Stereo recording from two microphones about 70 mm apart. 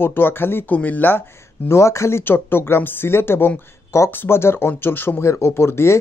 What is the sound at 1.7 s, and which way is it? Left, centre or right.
Speech, left.